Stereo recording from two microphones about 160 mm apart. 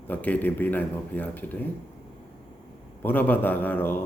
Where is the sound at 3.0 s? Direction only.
10° left (ahead or behind).